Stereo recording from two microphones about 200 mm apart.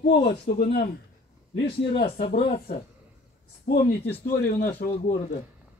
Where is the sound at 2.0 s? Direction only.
30° left (ahead or behind).